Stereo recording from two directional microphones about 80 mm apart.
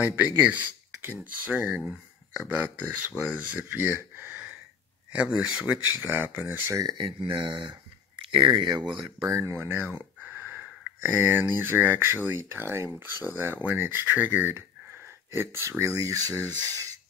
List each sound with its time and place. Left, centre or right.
0.0 s speech: right
1.5 s speech: centre
5.1 s speech: centre
6.0 s speech: right
6.7 s speech: right
7.0 s speech: right
9.2 s speech: right
9.9 s a sound: right
11.1 s speech: right
15.8 s speech: right